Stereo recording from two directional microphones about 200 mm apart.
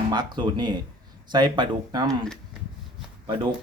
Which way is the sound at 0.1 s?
20° right (ahead or behind).